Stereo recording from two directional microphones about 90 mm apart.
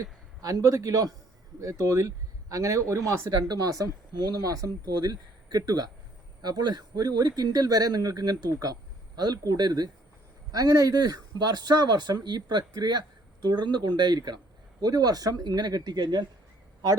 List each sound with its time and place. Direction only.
0.0 s a man's voice: 40° right (ahead or behind)
10.5 s speech: 40° right (ahead or behind)